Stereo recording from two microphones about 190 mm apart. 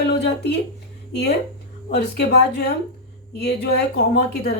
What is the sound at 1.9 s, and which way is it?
A woman's voice, 60° left (ahead or behind).